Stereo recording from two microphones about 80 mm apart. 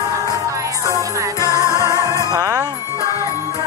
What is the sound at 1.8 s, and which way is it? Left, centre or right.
Music, right.